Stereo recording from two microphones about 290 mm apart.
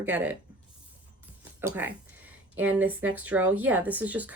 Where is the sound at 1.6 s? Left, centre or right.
Centre.